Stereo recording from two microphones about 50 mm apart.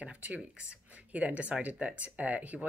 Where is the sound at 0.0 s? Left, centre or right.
Right.